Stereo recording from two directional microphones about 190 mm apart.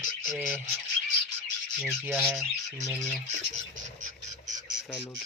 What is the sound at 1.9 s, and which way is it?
Speech, 10° right (ahead or behind).